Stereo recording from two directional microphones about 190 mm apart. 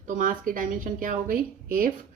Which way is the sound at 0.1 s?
45° right (ahead or behind).